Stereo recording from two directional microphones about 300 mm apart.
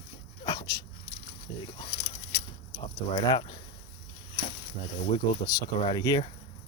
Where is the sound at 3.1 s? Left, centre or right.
Centre.